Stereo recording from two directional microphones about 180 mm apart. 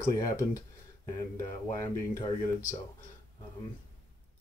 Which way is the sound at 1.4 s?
20° left (ahead or behind).